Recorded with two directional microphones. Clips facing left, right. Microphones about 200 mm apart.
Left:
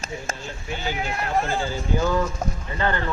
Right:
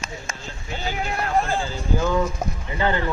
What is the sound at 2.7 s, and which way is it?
Speech, 15° right (ahead or behind).